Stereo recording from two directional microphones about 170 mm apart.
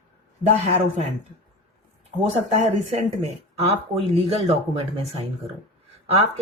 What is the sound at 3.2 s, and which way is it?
Speech, 35° right (ahead or behind).